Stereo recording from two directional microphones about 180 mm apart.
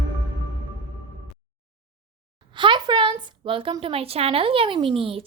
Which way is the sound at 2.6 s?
25° right (ahead or behind).